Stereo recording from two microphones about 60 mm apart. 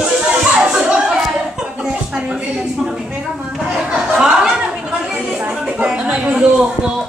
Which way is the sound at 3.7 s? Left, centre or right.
Centre.